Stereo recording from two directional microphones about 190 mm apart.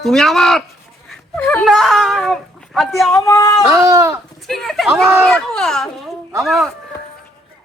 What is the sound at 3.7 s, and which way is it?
Speech, 15° right (ahead or behind).